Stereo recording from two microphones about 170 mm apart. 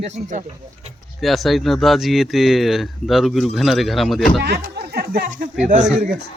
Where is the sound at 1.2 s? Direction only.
Centre (ahead or behind).